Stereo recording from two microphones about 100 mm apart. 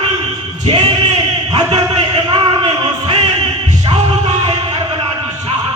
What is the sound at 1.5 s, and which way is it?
Music, 40° right (ahead or behind).